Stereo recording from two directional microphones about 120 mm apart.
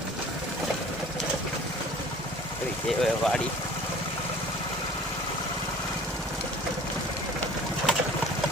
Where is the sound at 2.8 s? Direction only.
5° left (ahead or behind).